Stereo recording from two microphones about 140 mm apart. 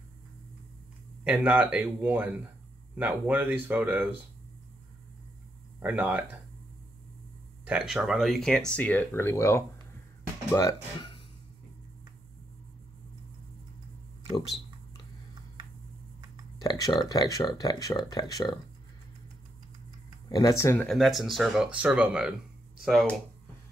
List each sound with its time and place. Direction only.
1.2 s speech: 15° right (ahead or behind)
5.8 s speech: 10° right (ahead or behind)
7.6 s speech: 5° right (ahead or behind); by 11.1 s 20° left (ahead or behind)
16.5 s speech: 25° left (ahead or behind)
20.2 s speech: 25° left (ahead or behind)
20.7 s speech: 5° left (ahead or behind)